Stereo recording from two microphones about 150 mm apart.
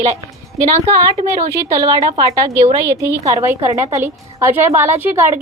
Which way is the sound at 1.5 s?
20° right (ahead or behind).